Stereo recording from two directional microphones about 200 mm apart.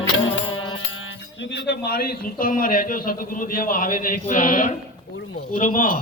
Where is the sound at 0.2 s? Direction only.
80° left.